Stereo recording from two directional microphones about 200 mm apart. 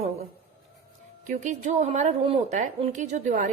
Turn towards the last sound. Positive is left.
turn(degrees=-40)  # may be behind; listen again after turning